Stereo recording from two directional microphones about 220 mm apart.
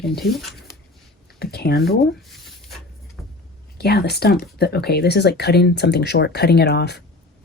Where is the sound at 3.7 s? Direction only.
45° left (ahead or behind).